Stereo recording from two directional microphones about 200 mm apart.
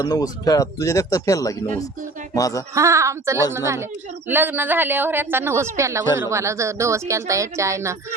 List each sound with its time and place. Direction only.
0.0 s speech: 20° left (ahead or behind)
2.7 s a woman's voice: 15° right (ahead or behind)